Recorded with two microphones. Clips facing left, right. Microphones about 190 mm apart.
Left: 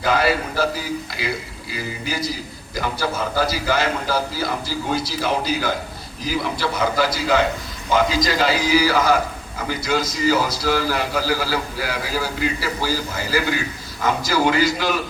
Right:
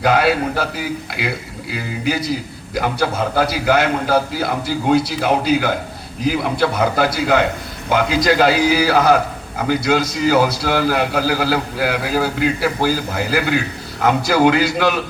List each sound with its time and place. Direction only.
0.0 s a man's voice: 65° right (ahead or behind)